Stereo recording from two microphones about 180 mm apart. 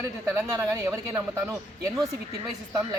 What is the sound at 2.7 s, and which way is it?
Speech, 15° right (ahead or behind).